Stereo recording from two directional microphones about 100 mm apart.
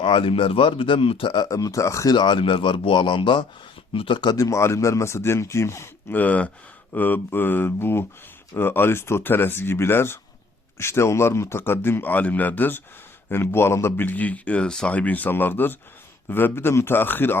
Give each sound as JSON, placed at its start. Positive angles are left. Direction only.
{"t": 0.0, "sound": "speech", "side_deg": 60}
{"t": 1.5, "sound": "speech", "side_deg": 35}
{"t": 2.1, "sound": "speech", "side_deg": 50}
{"t": 4.4, "sound": "speech", "side_deg": 30}